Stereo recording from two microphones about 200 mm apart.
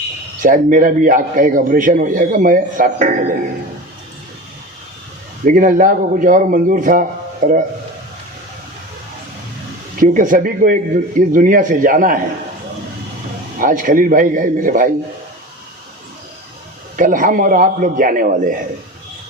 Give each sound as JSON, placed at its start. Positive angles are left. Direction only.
{"t": 0.4, "sound": "a man's voice", "side_deg": -40}
{"t": 5.5, "sound": "a man's voice", "side_deg": -40}
{"t": 10.0, "sound": "a man's voice", "side_deg": -45}
{"t": 13.6, "sound": "a man's voice", "side_deg": -45}
{"t": 17.0, "sound": "a man's voice", "side_deg": -40}